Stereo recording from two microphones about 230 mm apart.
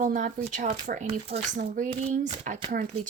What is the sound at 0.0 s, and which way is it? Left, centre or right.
Speech, right.